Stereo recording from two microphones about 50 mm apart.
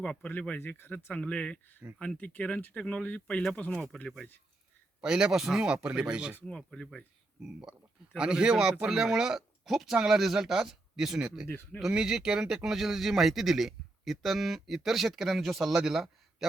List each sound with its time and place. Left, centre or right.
0.0 s speech: left
0.3 s speech: left
1.2 s speech: centre
4.9 s speech: centre
6.4 s speech: centre
7.4 s speech: centre
11.4 s speech: left
11.8 s speech: centre